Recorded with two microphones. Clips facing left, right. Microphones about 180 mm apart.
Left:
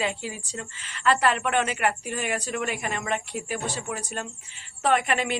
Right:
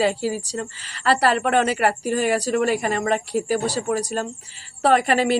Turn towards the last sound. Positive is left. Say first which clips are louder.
# right 6 dB
turn(degrees=-35)  # may be behind; listen again after turning